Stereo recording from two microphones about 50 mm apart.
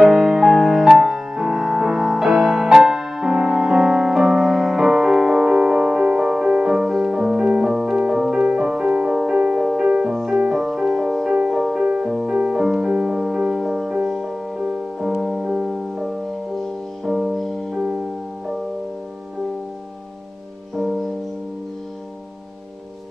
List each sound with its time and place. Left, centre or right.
0.0 s music: centre
9.3 s music: right
9.6 s music: centre
11.8 s music: centre
20.7 s music: centre